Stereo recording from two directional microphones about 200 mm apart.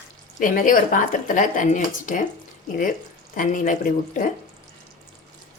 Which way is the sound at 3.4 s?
40° left (ahead or behind).